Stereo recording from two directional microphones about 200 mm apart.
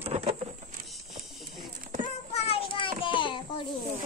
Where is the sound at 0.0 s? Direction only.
30° right (ahead or behind).